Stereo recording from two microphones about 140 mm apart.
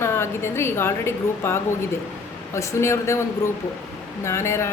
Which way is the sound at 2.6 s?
20° left (ahead or behind).